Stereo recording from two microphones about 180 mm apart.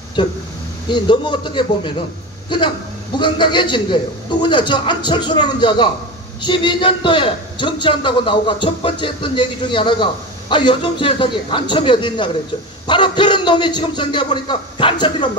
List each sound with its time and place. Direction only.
0.2 s a man's voice: 25° left (ahead or behind)